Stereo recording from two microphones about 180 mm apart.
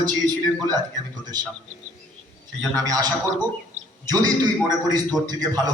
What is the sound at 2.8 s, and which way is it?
A man's voice, 20° right (ahead or behind).